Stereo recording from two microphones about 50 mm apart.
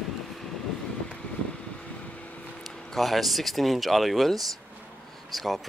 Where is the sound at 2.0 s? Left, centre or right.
Left.